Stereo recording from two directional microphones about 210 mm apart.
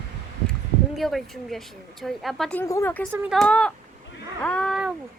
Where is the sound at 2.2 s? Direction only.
Centre (ahead or behind).